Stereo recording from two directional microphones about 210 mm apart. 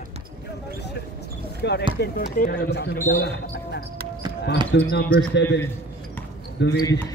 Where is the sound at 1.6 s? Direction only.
55° left (ahead or behind).